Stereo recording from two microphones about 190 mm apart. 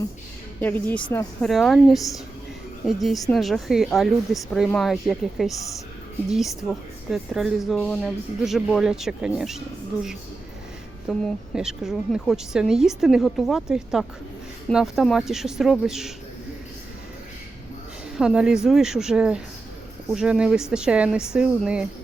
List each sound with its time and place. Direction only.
0.6 s speech: 10° left (ahead or behind)
11.1 s speech: 5° left (ahead or behind)
18.2 s speech: 5° right (ahead or behind)